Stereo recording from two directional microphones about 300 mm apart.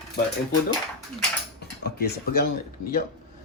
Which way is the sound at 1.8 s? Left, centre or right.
Left.